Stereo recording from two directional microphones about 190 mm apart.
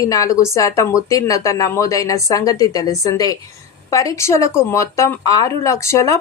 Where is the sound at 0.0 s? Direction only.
15° left (ahead or behind).